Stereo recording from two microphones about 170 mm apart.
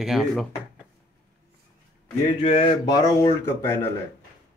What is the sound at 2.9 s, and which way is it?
Speech, 20° left (ahead or behind).